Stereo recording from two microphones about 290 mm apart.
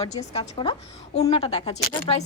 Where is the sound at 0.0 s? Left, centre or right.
Left.